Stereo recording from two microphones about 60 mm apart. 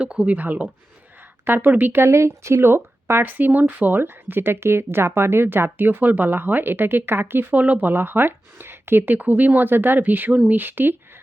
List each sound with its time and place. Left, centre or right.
0.0 s speech: centre; by 10.9 s right